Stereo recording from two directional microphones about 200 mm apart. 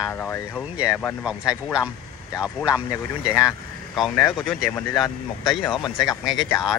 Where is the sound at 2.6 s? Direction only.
15° left (ahead or behind).